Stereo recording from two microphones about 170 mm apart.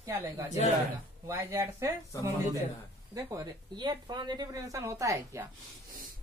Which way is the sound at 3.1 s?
20° right (ahead or behind).